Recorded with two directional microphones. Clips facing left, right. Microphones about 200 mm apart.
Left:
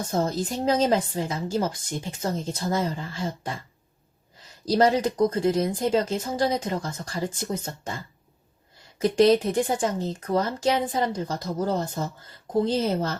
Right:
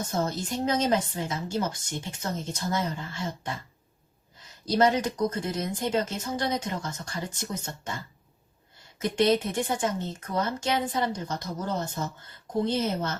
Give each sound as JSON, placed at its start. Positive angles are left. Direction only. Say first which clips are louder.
{"t": 0.1, "sound": "a woman's voice", "louder": "left 5 dB", "side_deg": 30}
{"t": 4.8, "sound": "a woman's voice", "louder": "left 3 dB", "side_deg": 30}
{"t": 9.0, "sound": "a woman's voice", "louder": "left 5 dB", "side_deg": 30}